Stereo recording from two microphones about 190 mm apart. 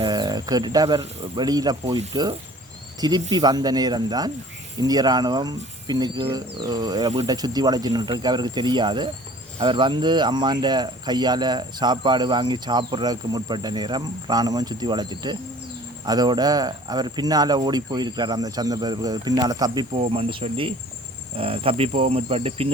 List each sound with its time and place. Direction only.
0.0 s speech: 20° right (ahead or behind)
3.0 s speech: 20° right (ahead or behind)